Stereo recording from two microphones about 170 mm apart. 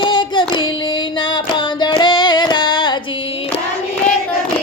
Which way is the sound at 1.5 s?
25° left (ahead or behind).